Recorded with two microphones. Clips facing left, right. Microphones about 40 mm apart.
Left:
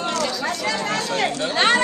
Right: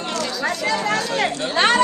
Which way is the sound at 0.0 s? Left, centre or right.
Left.